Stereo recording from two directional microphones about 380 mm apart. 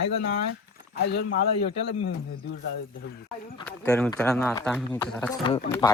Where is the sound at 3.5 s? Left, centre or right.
Centre.